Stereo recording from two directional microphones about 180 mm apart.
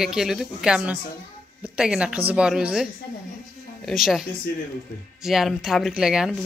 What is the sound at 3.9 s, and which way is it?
Speech, centre (ahead or behind).